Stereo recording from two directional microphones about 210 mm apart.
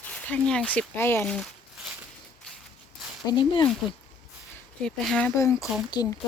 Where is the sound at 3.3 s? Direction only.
20° left (ahead or behind).